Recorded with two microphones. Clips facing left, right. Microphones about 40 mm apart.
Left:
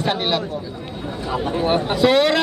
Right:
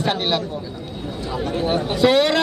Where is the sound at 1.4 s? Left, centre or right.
Left.